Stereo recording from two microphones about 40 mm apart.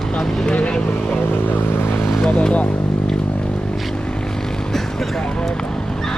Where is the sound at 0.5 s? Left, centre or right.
Left.